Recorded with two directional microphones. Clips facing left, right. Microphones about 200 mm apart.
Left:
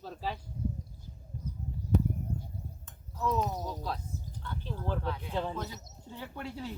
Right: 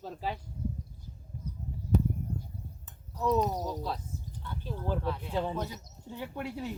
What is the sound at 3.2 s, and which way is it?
Speech, 15° right (ahead or behind).